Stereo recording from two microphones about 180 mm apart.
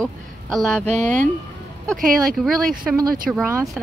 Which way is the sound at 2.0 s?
50° right (ahead or behind).